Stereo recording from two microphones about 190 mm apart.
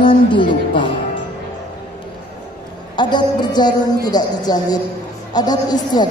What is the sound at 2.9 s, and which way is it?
A woman's voice, 25° left (ahead or behind).